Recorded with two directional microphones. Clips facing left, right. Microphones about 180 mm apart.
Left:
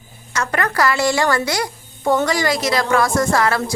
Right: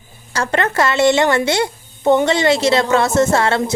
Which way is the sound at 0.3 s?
25° right (ahead or behind).